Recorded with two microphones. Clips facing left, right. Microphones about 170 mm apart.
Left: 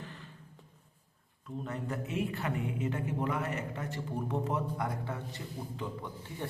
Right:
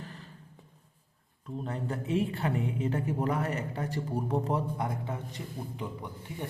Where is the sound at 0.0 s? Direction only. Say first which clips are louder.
Right 2 dB; 40° right (ahead or behind).